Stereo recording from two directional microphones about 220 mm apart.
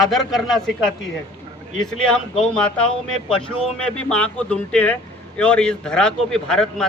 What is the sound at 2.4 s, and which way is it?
Speech, 5° left (ahead or behind).